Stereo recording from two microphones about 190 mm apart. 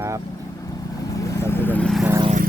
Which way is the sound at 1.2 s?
15° left (ahead or behind).